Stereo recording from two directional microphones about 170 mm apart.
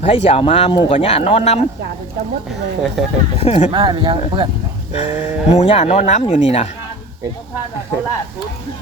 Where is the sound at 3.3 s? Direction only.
35° left (ahead or behind).